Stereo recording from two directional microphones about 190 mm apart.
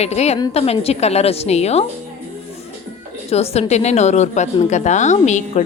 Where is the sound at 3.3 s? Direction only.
35° left (ahead or behind).